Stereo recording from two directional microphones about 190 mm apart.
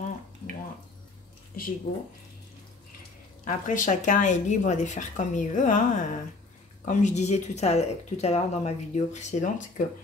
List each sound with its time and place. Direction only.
1.9 s speech: 30° left (ahead or behind)
3.4 s speech: 45° left (ahead or behind)